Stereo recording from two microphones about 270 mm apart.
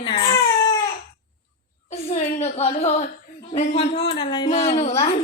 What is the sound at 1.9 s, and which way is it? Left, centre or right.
A woman's voice, left.